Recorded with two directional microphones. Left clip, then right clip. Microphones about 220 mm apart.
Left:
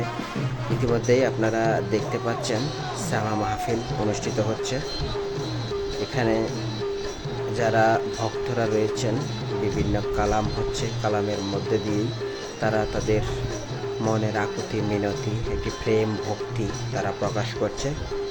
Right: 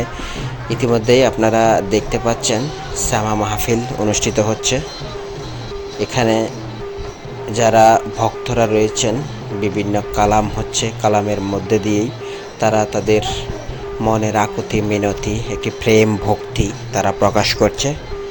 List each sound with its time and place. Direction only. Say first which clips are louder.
0.8 s a man's voice: right 9 dB; 15° right (ahead or behind)
6.1 s speech: right 9 dB; 20° right (ahead or behind)
7.5 s a man's voice: right 11 dB; 15° right (ahead or behind)